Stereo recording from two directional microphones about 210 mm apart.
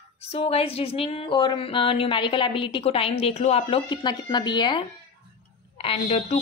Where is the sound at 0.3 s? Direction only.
30° left (ahead or behind).